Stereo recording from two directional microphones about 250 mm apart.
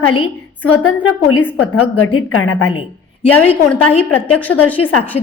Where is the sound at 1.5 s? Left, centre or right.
Left.